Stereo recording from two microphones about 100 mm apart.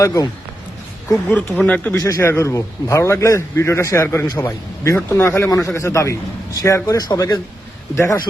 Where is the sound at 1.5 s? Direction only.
15° left (ahead or behind).